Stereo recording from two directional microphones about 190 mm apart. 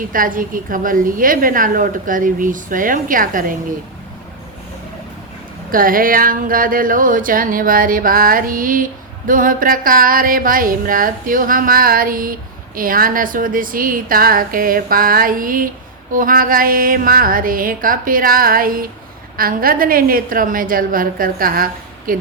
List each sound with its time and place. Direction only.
0.1 s speech: 45° right (ahead or behind)
5.7 s speech: 50° right (ahead or behind)